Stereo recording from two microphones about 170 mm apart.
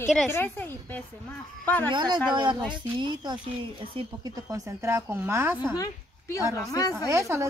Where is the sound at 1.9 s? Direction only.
25° right (ahead or behind).